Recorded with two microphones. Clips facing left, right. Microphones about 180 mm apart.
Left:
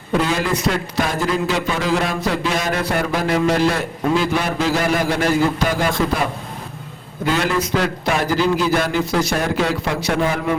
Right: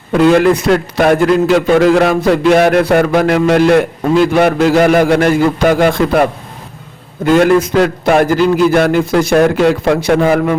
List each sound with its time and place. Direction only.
0.3 s a man's voice: 60° right (ahead or behind)
7.3 s a man's voice: 50° right (ahead or behind)